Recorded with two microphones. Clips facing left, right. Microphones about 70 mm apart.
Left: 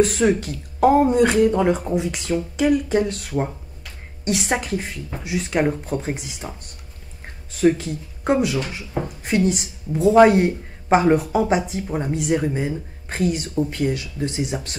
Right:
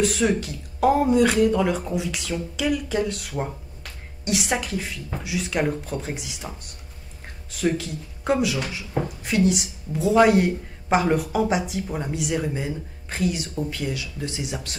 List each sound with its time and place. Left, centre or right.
0.0 s a woman's voice: left
7.7 s a woman's voice: left
10.1 s a woman's voice: left